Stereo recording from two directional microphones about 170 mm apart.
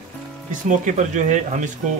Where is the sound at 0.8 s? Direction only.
45° right (ahead or behind).